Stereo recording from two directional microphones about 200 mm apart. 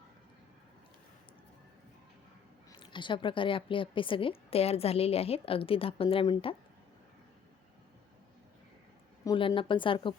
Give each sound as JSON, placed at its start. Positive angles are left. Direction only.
{"t": 2.7, "sound": "a woman's voice", "side_deg": 25}
{"t": 9.2, "sound": "a woman's voice", "side_deg": 20}